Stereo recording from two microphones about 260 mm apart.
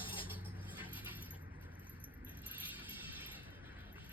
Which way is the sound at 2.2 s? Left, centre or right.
Centre.